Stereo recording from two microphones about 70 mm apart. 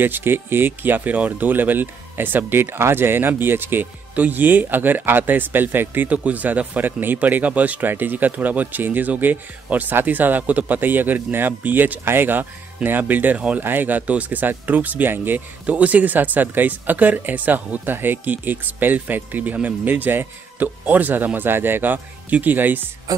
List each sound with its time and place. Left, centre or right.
0.0 s speech: right
23.1 s music: right